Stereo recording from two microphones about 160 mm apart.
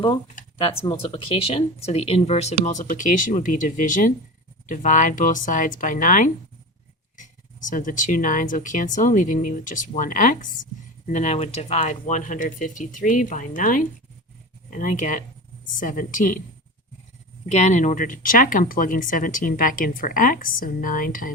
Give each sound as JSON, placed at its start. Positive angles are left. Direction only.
{"t": 0.6, "sound": "speech", "side_deg": 35}
{"t": 17.5, "sound": "speech", "side_deg": 45}